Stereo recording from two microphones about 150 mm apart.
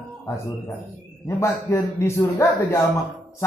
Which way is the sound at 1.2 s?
20° left (ahead or behind).